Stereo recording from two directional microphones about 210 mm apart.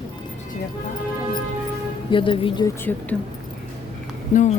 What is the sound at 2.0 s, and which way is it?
Speech, 25° left (ahead or behind).